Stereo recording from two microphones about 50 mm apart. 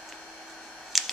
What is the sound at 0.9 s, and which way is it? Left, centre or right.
Typewriter, centre.